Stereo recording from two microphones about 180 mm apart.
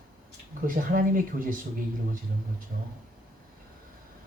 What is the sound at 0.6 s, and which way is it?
Speech, 50° right (ahead or behind).